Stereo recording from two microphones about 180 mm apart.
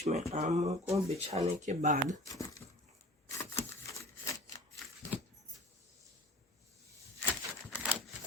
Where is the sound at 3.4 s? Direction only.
15° left (ahead or behind).